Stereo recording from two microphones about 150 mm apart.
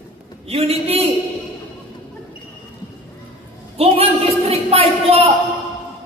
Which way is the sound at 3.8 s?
40° right (ahead or behind).